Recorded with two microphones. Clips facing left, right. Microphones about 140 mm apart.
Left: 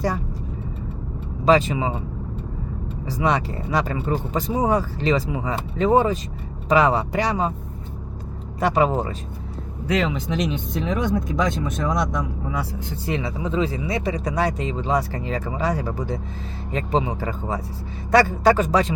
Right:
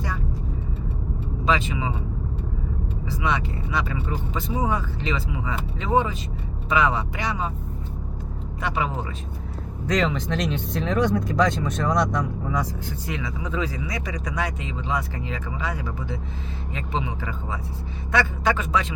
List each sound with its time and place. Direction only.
1.5 s speech: 40° left (ahead or behind)
3.1 s speech: 40° left (ahead or behind)
8.6 s speech: 40° left (ahead or behind)
9.8 s speech: 5° left (ahead or behind)
13.1 s speech: 30° left (ahead or behind)